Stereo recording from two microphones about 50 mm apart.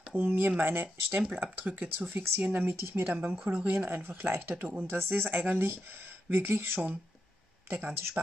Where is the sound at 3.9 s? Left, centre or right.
Right.